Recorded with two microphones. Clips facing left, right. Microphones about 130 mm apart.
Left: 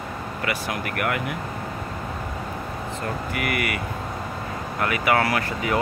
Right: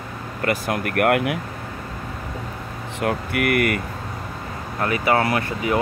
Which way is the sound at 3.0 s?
65° right (ahead or behind).